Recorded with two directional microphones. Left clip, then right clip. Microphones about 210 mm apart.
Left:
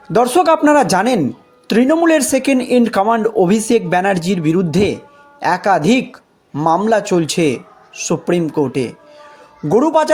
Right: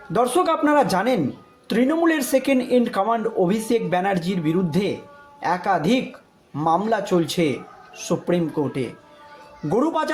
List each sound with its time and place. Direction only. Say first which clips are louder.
0.1 s speech: left 8 dB; 35° left (ahead or behind)